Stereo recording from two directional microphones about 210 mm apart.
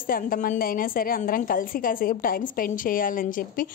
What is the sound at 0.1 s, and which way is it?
A woman's voice, 40° left (ahead or behind).